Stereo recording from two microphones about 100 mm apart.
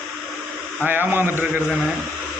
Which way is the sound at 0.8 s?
20° right (ahead or behind).